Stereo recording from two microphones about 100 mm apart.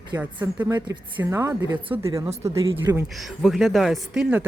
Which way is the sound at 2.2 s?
90° right.